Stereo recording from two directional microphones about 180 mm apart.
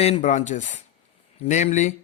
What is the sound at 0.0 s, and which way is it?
Speech, 40° left (ahead or behind).